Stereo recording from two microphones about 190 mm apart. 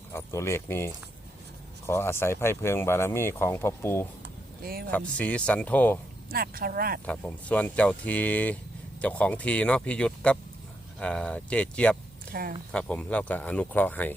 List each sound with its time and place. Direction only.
0.1 s speech: 15° left (ahead or behind)
4.6 s speech: 50° right (ahead or behind)
4.9 s speech: 5° left (ahead or behind)
6.3 s speech: 50° right (ahead or behind)
7.0 s speech: 5° left (ahead or behind)
12.3 s speech: 50° right (ahead or behind)
12.7 s speech: 5° left (ahead or behind)